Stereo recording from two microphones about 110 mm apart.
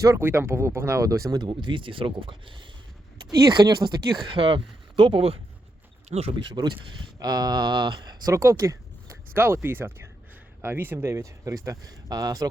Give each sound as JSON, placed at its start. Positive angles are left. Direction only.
{"t": 0.0, "sound": "speech", "side_deg": -25}
{"t": 6.1, "sound": "speech", "side_deg": -70}
{"t": 6.3, "sound": "speech", "side_deg": -40}
{"t": 8.3, "sound": "speech", "side_deg": -30}